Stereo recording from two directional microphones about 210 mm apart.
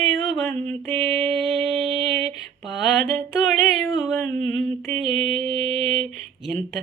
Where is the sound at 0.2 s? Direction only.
Centre (ahead or behind).